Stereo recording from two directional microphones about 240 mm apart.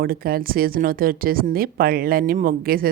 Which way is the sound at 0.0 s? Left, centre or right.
Right.